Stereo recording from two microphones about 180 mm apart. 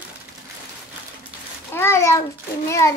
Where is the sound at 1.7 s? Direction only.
15° left (ahead or behind).